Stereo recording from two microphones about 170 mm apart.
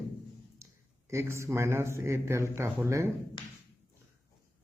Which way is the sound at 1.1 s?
15° right (ahead or behind).